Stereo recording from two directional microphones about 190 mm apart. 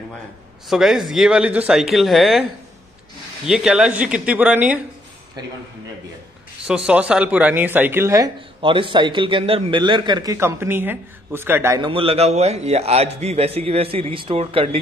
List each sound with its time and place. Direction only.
0.7 s speech: centre (ahead or behind)
3.4 s speech: 5° right (ahead or behind)
6.9 s speech: 5° right (ahead or behind)
8.5 s a man's voice: 25° right (ahead or behind)
11.8 s a man's voice: 30° right (ahead or behind)